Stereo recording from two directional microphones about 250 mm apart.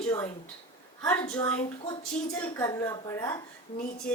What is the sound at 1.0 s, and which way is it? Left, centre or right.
A woman's voice, centre.